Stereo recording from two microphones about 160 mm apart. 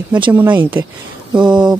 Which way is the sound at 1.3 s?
25° right (ahead or behind).